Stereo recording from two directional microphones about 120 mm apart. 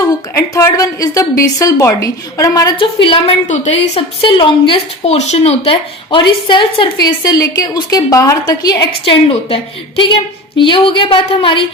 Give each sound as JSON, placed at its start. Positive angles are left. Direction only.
{"t": 0.0, "sound": "a woman's voice", "side_deg": 30}
{"t": 2.7, "sound": "a woman's voice", "side_deg": 45}
{"t": 3.4, "sound": "a woman's voice", "side_deg": 75}
{"t": 5.0, "sound": "a woman's voice", "side_deg": 65}
{"t": 7.2, "sound": "a woman's voice", "side_deg": 30}
{"t": 9.0, "sound": "a woman's voice", "side_deg": 50}
{"t": 10.6, "sound": "a woman's voice", "side_deg": 45}